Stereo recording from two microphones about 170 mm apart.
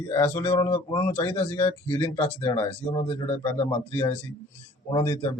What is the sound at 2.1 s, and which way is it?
Speech, 10° left (ahead or behind).